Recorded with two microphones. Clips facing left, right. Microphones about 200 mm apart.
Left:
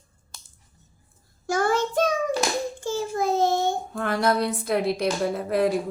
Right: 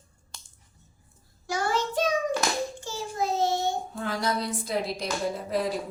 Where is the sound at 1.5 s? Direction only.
50° left (ahead or behind).